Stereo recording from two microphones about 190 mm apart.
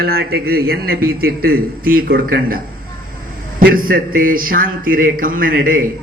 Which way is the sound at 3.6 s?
50° right (ahead or behind).